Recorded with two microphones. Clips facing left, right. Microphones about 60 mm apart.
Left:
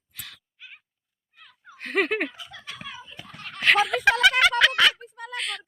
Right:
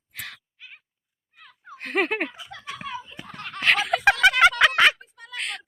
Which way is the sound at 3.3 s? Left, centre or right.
Right.